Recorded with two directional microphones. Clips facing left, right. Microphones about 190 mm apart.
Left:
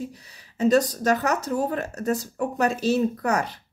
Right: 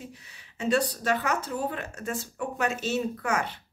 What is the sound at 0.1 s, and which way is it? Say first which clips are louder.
Speech: left 2 dB; 40° left (ahead or behind).